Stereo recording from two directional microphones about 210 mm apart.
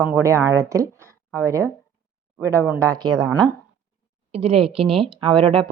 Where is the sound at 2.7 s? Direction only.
15° right (ahead or behind).